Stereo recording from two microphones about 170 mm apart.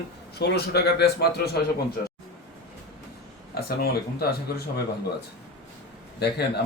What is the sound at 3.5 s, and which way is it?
Speech, 65° left (ahead or behind).